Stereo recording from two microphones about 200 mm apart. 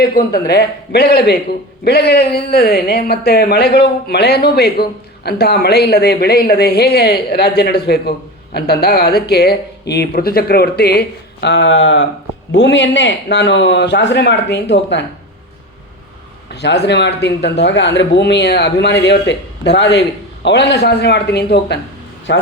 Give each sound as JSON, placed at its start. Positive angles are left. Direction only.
{"t": 0.0, "sound": "a man's voice", "side_deg": 50}
{"t": 16.5, "sound": "speech", "side_deg": 55}